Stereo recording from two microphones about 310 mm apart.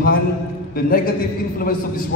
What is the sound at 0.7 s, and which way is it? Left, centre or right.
Speech, left.